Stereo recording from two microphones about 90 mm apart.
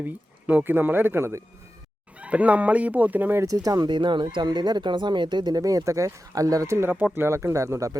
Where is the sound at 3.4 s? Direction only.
40° right (ahead or behind).